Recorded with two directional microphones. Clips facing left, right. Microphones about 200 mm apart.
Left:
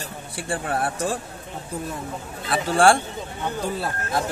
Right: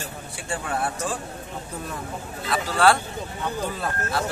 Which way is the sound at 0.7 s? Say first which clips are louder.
Left 1 dB; 35° left (ahead or behind).